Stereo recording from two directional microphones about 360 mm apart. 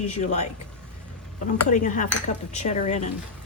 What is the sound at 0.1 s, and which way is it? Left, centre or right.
Speech, centre.